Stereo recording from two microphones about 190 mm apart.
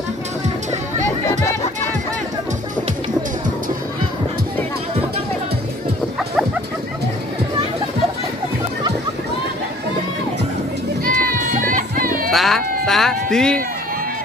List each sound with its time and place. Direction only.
11.1 s music: 45° right (ahead or behind)
12.3 s cat: centre (ahead or behind)